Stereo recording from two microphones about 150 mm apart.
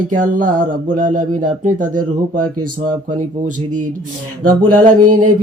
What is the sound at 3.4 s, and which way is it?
Speech, 55° right (ahead or behind).